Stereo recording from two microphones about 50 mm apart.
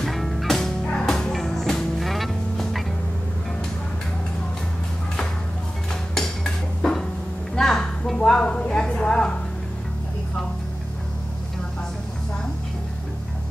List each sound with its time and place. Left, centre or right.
0.0 s music: centre
0.6 s music: centre
6.1 s dishes: centre
7.5 s music: centre
8.5 s a sound: left